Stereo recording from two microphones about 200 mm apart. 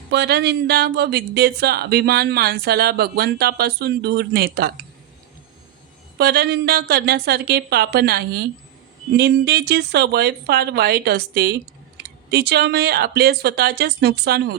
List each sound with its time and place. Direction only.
0.1 s speech: 55° right (ahead or behind)
6.1 s speech: 55° right (ahead or behind)